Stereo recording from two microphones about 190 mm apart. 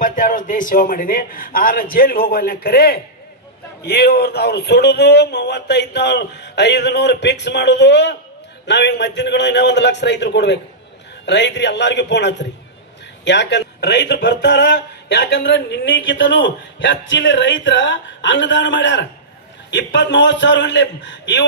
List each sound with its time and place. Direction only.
0.0 s a man's voice: 45° left (ahead or behind); by 21.5 s 70° left (ahead or behind)